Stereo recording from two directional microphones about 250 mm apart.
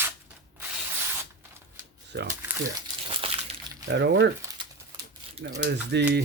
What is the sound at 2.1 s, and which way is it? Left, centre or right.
Speech, right.